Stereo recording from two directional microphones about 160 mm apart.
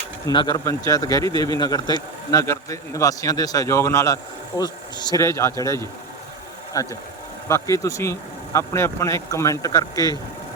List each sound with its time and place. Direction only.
0.3 s a man's voice: 25° left (ahead or behind)